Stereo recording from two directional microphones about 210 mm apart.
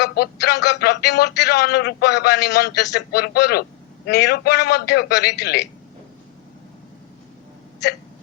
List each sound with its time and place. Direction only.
0.0 s speech: 50° left (ahead or behind)